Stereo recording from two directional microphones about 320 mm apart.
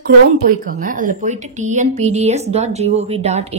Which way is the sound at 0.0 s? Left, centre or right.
Right.